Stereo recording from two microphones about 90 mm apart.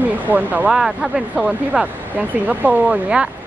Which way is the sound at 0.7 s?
5° right (ahead or behind).